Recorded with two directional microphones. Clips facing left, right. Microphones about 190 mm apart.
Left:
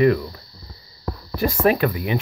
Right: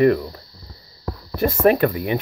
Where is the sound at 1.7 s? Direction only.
45° right (ahead or behind).